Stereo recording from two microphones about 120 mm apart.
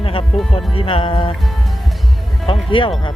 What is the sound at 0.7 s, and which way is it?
Speech, 50° left (ahead or behind).